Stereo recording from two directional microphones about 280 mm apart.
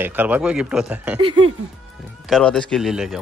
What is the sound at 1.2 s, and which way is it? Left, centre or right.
Speech, centre.